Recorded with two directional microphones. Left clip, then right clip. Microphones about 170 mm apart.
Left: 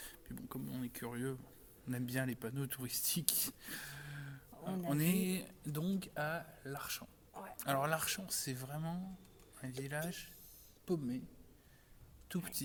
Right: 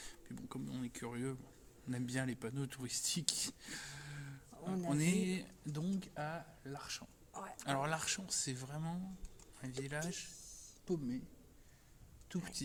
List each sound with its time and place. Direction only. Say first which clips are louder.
0.0 s a sound: even; 10° left (ahead or behind)
1.9 s speech: left 1 dB; 10° left (ahead or behind)
10.8 s speech: left 1 dB; 25° left (ahead or behind)
12.3 s speech: left 1 dB; 20° left (ahead or behind)